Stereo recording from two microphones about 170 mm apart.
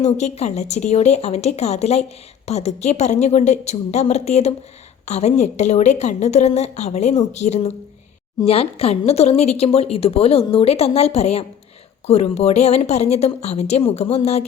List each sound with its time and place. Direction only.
0.0 s a woman's voice: 40° left (ahead or behind)